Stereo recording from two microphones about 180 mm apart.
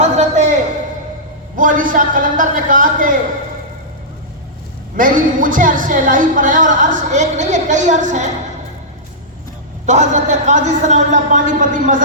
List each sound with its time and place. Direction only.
0.0 s a sound: 40° right (ahead or behind)
1.5 s a woman's voice: 45° right (ahead or behind)
4.9 s a woman's voice: 50° right (ahead or behind)
9.8 s a woman's voice: 40° right (ahead or behind)